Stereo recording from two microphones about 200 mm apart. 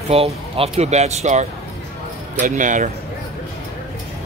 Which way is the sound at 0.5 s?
30° right (ahead or behind).